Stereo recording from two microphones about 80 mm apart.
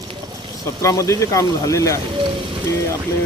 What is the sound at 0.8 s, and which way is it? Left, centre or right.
Speech, left.